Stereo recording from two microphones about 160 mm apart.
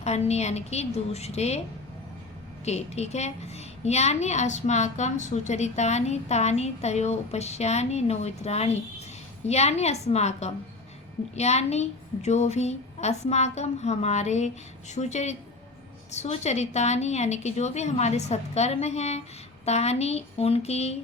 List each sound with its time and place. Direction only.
0.0 s a woman's voice: 40° left (ahead or behind)
2.6 s a child's voice: 40° left (ahead or behind)